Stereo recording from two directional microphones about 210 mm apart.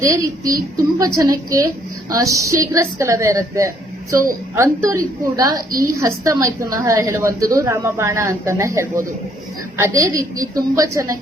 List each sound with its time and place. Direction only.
0.0 s a woman's voice: 15° right (ahead or behind)